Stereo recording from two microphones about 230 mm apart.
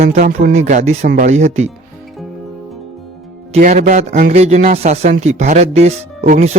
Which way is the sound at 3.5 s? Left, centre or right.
Right.